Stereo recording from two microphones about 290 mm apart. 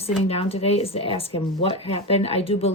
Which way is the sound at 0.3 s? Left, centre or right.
Centre.